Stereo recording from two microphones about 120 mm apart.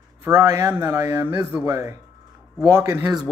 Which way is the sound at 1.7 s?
25° right (ahead or behind).